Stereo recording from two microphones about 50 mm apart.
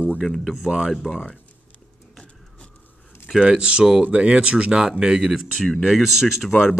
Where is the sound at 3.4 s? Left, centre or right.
Centre.